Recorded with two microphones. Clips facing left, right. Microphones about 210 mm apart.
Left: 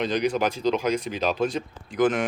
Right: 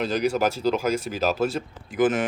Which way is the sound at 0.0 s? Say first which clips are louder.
Right 1 dB; 5° right (ahead or behind).